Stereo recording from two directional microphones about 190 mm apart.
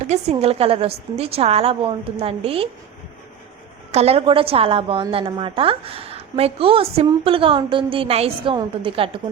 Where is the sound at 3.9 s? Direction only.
30° right (ahead or behind).